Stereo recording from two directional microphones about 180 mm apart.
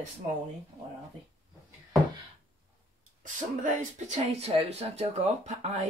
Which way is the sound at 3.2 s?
45° right (ahead or behind).